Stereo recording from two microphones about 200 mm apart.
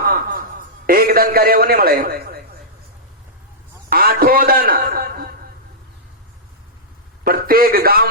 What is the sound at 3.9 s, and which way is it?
A man's voice, 50° right (ahead or behind).